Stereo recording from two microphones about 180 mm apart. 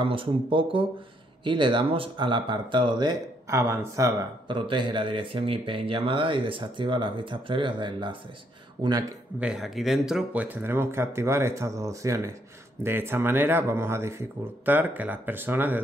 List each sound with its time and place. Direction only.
0.0 s speech: 30° right (ahead or behind)
9.4 s speech: 5° right (ahead or behind)